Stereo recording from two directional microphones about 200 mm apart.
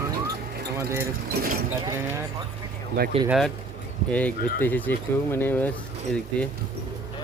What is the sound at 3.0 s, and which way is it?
Speech, 50° right (ahead or behind).